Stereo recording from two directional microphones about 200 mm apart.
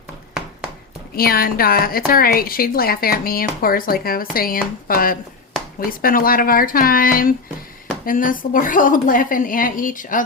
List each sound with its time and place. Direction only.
1.1 s a woman's voice: 50° left (ahead or behind)